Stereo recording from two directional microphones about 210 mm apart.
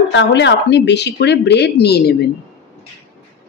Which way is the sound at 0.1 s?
60° left (ahead or behind).